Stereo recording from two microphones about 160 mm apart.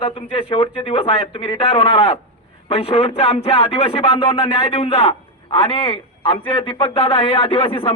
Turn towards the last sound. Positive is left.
turn(degrees=35)  # may be behind; listen again after turning